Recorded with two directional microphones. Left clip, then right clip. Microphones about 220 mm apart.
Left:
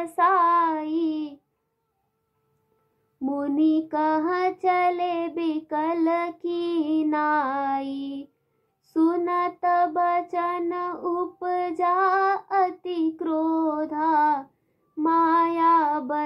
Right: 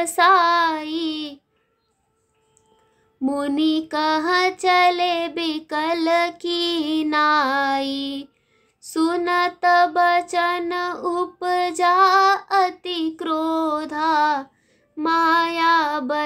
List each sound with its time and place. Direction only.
0.0 s child singing: 40° right (ahead or behind)
3.3 s child singing: 25° right (ahead or behind)